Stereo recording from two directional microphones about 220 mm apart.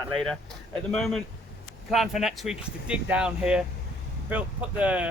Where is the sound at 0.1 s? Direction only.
Centre (ahead or behind).